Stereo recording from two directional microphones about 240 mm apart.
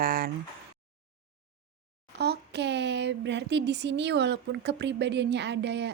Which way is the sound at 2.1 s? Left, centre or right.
Right.